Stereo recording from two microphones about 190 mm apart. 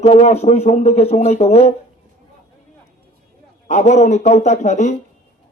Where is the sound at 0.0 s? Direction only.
35° left (ahead or behind).